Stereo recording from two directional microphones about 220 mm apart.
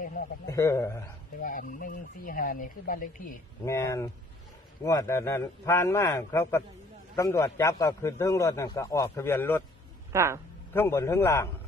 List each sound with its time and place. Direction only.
0.0 s a sound: 40° left (ahead or behind)
0.5 s a man's voice: 15° left (ahead or behind)
1.4 s speech: 40° left (ahead or behind)
3.6 s a man's voice: 15° left (ahead or behind)
10.1 s a woman's voice: 10° right (ahead or behind)
10.7 s a man's voice: 10° left (ahead or behind)